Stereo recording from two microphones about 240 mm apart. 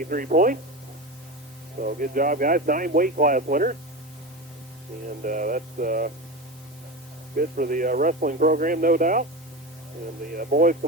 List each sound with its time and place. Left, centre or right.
0.0 s speech: right
1.8 s speech: right
5.2 s speech: right
7.3 s speech: right
10.3 s speech: right